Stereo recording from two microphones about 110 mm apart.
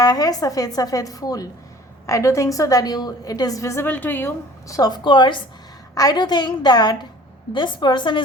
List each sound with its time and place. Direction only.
0.0 s a woman's voice: 35° left (ahead or behind); by 4.3 s 20° left (ahead or behind)
4.7 s a woman's voice: 40° left (ahead or behind)
5.9 s a woman's voice: 35° left (ahead or behind)